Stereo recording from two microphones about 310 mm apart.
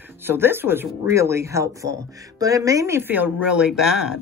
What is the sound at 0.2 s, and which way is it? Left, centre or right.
Speech, centre.